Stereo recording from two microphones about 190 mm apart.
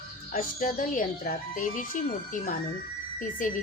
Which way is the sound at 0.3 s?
45° left (ahead or behind).